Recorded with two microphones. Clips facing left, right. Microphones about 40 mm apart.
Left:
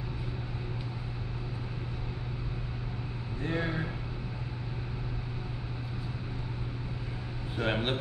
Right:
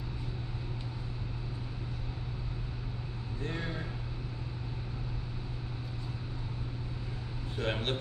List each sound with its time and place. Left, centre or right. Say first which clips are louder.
3.4 s vehicle: left 6 dB; left
7.5 s a man's voice: left 3 dB; centre